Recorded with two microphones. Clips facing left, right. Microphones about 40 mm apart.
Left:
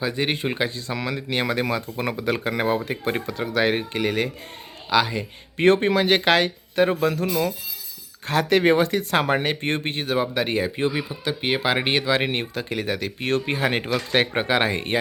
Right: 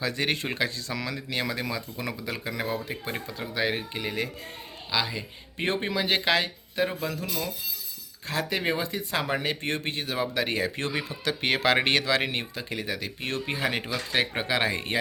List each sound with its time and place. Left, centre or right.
0.0 s speech: left
0.8 s speech: left
3.2 s speech: left
7.3 s speech: left
8.3 s speech: left
10.9 s speech: centre
12.3 s speech: left